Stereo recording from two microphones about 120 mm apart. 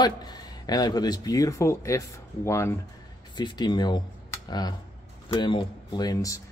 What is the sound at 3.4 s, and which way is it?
A man's voice, 35° left (ahead or behind).